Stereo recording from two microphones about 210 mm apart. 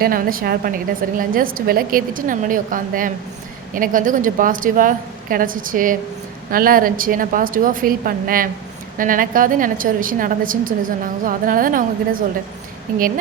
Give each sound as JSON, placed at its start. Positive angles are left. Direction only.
{"t": 0.0, "sound": "a woman's voice", "side_deg": -45}